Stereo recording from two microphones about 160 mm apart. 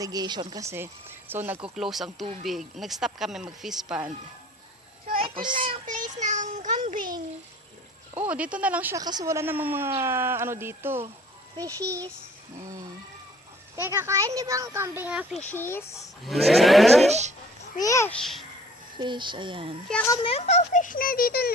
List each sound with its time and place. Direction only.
0.0 s speech: 25° right (ahead or behind)
1.6 s speech: centre (ahead or behind)
5.2 s speech: 30° right (ahead or behind)
5.9 s child singing: 50° right (ahead or behind)
8.2 s speech: 10° right (ahead or behind)
9.0 s speech: 25° right (ahead or behind)
13.7 s speech: 15° right (ahead or behind)
15.4 s speech: 15° left (ahead or behind)
16.2 s speech: centre (ahead or behind)
17.1 s speech: 45° right (ahead or behind)
17.8 s a child's voice: 20° left (ahead or behind)
18.2 s speech: centre (ahead or behind)
18.9 s speech: 30° right (ahead or behind)
20.2 s a child's voice: 40° left (ahead or behind); by 21.5 s 70° left (ahead or behind)